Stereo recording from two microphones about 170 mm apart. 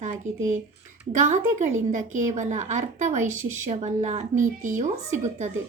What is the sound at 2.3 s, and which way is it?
A woman's voice, 45° right (ahead or behind).